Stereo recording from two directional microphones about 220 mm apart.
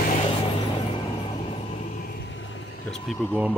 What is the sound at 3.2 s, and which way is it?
Speech, 10° left (ahead or behind).